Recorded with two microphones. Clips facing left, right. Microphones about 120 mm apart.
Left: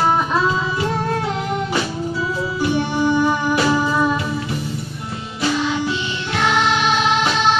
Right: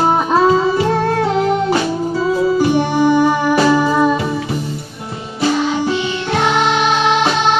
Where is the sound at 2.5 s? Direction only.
65° right (ahead or behind).